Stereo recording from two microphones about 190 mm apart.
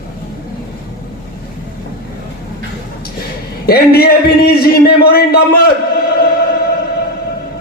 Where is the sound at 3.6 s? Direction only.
55° left (ahead or behind).